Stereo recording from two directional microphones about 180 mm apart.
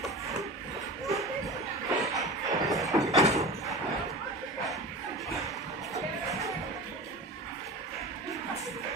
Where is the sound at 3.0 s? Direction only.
20° right (ahead or behind).